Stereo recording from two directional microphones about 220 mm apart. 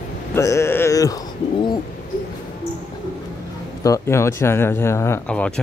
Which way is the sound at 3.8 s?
15° left (ahead or behind).